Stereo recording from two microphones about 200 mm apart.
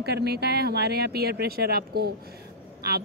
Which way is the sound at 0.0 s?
55° right (ahead or behind).